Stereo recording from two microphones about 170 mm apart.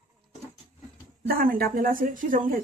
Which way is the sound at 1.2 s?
55° right (ahead or behind).